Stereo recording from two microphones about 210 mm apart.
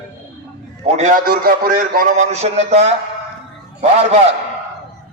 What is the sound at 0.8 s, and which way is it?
A man's voice, 35° right (ahead or behind).